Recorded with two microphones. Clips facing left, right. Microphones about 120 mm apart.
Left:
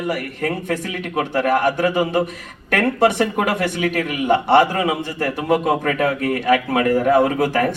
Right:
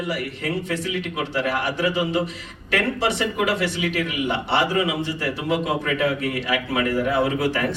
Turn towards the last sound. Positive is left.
turn(degrees=50)  # may be behind; listen again after turning